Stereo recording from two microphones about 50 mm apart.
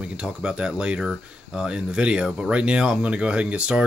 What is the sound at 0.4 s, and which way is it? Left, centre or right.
Speech, centre.